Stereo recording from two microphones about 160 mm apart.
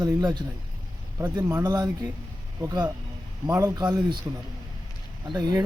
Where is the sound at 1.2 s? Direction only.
15° right (ahead or behind).